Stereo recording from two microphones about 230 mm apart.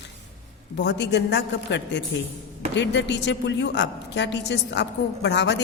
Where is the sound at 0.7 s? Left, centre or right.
Left.